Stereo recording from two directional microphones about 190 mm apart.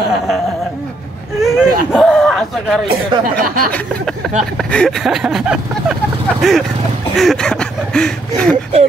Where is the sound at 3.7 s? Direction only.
5° left (ahead or behind).